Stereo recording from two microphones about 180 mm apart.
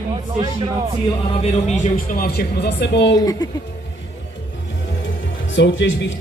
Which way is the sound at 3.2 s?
20° left (ahead or behind).